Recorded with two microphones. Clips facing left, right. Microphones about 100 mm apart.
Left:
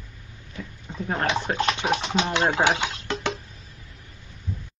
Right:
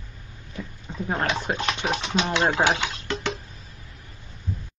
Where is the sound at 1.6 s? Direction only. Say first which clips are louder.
Left 2 dB; 15° left (ahead or behind).